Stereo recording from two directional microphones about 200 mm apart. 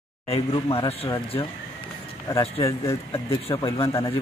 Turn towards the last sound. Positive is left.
turn(degrees=15)  # may be behind; listen again after turning